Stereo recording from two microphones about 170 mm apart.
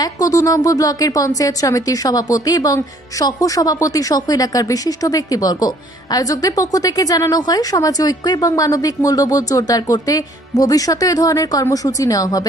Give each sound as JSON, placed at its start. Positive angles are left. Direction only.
{"t": 0.0, "sound": "speech", "side_deg": 20}